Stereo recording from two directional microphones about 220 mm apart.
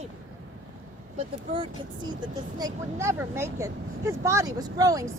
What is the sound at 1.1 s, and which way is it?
Speech, 25° right (ahead or behind).